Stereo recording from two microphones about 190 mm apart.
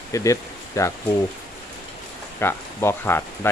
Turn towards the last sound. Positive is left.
turn(degrees=10)  # may be behind; listen again after turning